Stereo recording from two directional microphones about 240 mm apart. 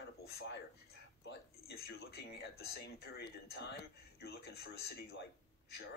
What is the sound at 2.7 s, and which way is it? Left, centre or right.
Speech, left.